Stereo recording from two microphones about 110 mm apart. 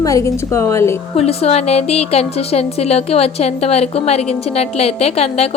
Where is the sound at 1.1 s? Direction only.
65° left (ahead or behind).